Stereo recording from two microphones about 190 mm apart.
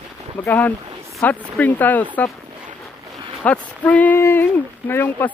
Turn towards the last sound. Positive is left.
turn(degrees=10)  # may be behind; listen again after turning